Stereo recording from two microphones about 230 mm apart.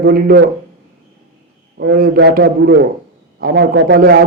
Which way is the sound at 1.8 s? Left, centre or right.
Right.